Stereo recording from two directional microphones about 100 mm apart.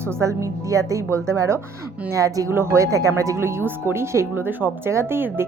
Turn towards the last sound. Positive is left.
turn(degrees=-25)  # may be behind; listen again after turning